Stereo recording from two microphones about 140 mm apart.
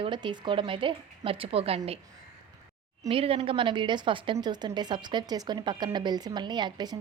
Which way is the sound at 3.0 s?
40° right (ahead or behind).